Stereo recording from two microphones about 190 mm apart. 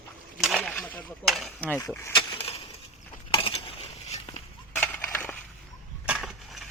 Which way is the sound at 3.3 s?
30° left (ahead or behind).